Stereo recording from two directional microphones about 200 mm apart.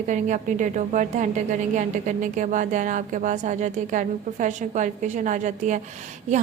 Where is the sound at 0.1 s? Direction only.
40° right (ahead or behind).